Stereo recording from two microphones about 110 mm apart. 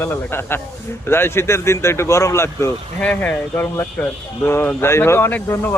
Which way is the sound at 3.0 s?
10° left (ahead or behind).